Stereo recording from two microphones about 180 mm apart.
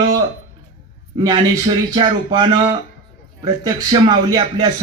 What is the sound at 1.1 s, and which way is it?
Speech, 25° right (ahead or behind).